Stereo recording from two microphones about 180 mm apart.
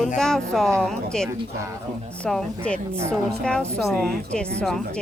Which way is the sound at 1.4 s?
15° right (ahead or behind).